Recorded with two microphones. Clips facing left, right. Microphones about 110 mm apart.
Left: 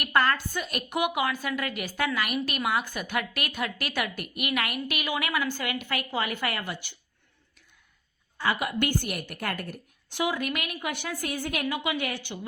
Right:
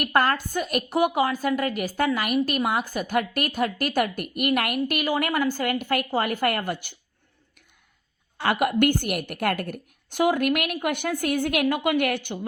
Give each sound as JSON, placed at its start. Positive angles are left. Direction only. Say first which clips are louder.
{"t": 0.0, "sound": "a woman's voice", "louder": "right 3 dB", "side_deg": -45}
{"t": 8.4, "sound": "a woman's voice", "louder": "right 6 dB", "side_deg": -60}